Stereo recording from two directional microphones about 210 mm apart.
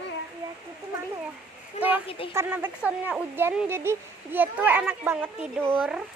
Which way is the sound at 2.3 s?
10° right (ahead or behind).